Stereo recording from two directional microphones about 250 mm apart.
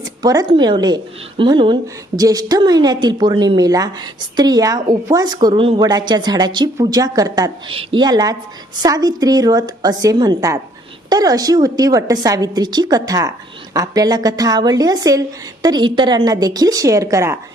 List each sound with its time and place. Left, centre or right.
0.2 s a woman's voice: centre